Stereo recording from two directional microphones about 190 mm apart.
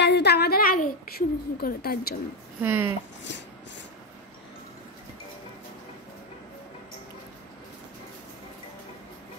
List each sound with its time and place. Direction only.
0.0 s a woman's voice: 60° left (ahead or behind)
2.6 s speech: 10° right (ahead or behind)